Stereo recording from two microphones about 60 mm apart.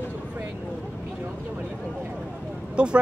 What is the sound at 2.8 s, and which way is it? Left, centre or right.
Speech, centre.